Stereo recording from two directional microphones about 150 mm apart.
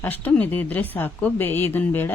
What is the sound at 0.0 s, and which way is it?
Speech, 10° left (ahead or behind).